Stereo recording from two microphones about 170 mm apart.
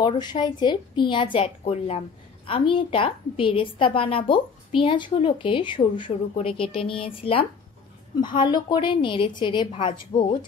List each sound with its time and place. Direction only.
0.0 s a woman's voice: 25° left (ahead or behind)